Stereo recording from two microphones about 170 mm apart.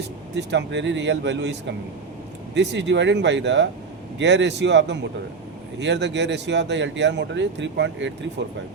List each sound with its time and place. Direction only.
0.3 s speech: 90° right